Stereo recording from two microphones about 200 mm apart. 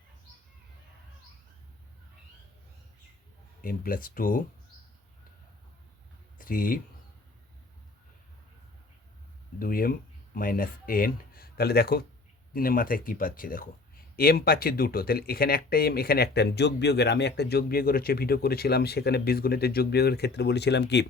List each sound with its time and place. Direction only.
3.6 s speech: 45° left (ahead or behind)
6.4 s speech: 45° left (ahead or behind)
9.6 s speech: 45° left (ahead or behind)